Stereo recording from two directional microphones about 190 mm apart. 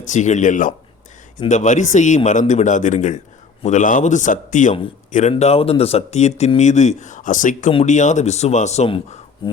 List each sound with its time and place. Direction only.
0.0 s speech: 40° left (ahead or behind)
5.3 s speech: 30° left (ahead or behind)